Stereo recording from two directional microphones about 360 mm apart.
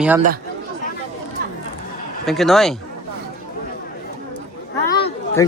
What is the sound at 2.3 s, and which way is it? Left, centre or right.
Speech, centre.